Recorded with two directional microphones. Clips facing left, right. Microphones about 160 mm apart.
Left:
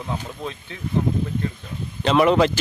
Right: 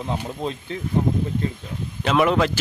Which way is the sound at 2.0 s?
Centre (ahead or behind).